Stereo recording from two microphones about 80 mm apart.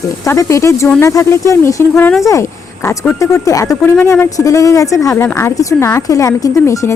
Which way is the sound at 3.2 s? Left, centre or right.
Left.